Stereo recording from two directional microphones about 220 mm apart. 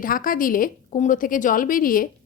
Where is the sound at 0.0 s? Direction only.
40° left (ahead or behind).